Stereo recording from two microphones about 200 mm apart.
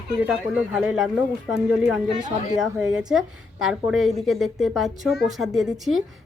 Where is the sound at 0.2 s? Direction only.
5° right (ahead or behind).